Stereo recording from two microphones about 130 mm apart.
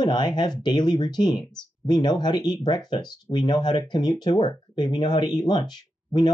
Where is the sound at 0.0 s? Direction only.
35° left (ahead or behind).